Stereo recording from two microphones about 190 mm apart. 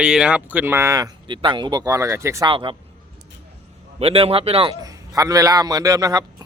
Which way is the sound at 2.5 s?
25° right (ahead or behind).